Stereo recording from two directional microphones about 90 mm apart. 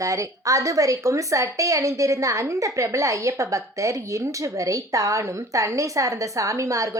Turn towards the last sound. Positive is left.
turn(degrees=-40)  # may be behind; listen again after turning